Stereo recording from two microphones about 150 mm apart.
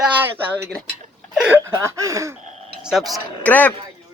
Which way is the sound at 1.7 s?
20° right (ahead or behind).